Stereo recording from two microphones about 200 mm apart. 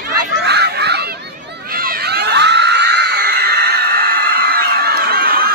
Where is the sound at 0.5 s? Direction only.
55° right (ahead or behind).